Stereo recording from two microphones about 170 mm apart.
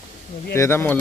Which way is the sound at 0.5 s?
15° left (ahead or behind).